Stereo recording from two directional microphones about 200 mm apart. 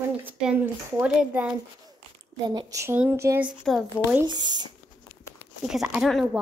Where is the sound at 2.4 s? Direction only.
20° right (ahead or behind).